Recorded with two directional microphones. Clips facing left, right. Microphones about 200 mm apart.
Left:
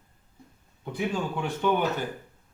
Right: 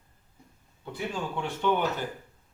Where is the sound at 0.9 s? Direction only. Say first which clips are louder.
Left 4 dB; 10° left (ahead or behind).